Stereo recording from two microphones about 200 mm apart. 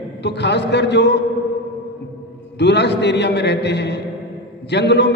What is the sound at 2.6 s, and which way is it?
A man's voice, 60° left (ahead or behind).